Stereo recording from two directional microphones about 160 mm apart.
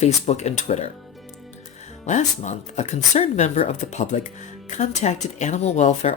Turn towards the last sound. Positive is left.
turn(degrees=45)  # may be behind; listen again after turning